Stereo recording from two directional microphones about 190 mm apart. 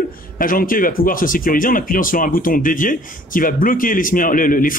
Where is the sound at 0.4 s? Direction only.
45° left (ahead or behind).